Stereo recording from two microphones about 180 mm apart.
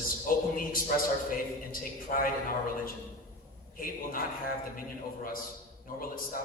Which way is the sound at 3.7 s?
50° left (ahead or behind).